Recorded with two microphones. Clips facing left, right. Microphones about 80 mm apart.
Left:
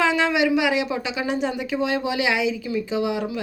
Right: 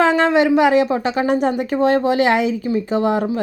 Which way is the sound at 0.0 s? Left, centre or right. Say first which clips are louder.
Right 6 dB; right.